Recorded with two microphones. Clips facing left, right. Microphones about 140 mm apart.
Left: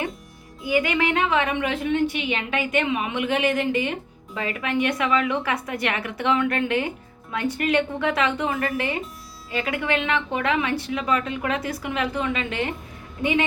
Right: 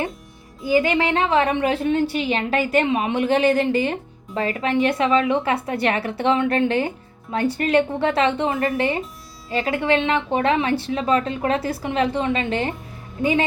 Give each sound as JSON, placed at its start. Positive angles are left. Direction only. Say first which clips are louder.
{"t": 0.7, "sound": "a woman's voice", "louder": "right 3 dB", "side_deg": -30}